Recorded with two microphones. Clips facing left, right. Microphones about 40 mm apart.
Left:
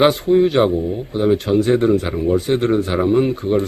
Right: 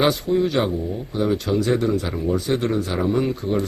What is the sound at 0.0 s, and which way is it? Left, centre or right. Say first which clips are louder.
Speech: left 6 dB; left.